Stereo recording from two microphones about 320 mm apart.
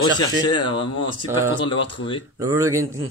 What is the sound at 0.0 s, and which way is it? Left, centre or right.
Speech, centre.